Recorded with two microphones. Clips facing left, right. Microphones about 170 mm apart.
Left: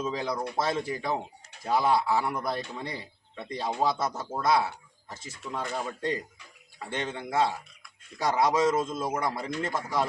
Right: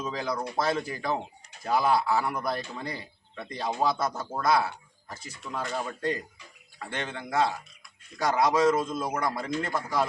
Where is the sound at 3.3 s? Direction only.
Centre (ahead or behind).